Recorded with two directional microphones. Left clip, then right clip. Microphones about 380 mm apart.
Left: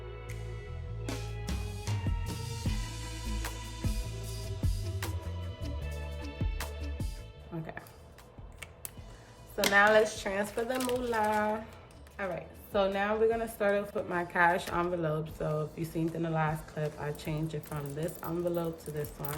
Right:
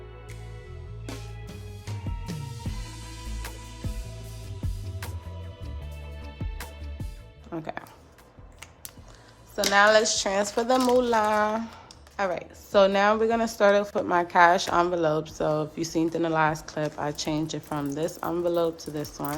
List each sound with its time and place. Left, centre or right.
1.0 s music: centre
6.2 s music: centre
9.7 s a woman's voice: centre